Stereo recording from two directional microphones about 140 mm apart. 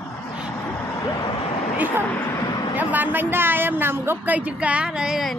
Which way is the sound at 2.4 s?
35° left (ahead or behind).